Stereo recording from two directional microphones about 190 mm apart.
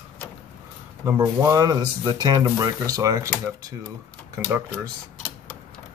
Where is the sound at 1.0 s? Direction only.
15° right (ahead or behind).